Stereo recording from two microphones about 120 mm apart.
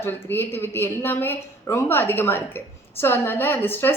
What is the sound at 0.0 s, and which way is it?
A woman's voice, 20° left (ahead or behind).